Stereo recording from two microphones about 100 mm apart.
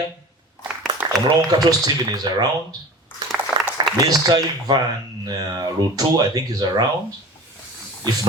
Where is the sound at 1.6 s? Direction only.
40° right (ahead or behind).